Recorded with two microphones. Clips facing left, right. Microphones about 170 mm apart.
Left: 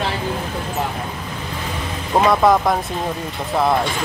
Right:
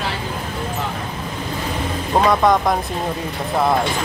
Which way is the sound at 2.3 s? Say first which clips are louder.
Left 1 dB; centre (ahead or behind).